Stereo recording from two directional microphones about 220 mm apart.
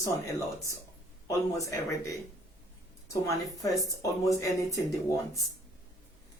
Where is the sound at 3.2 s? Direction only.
15° left (ahead or behind).